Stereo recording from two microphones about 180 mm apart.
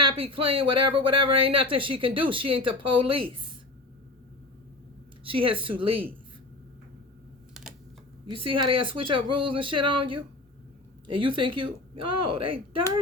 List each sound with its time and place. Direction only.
0.3 s speech: 30° right (ahead or behind)
5.2 s speech: 30° right (ahead or behind)
8.3 s speech: 30° right (ahead or behind)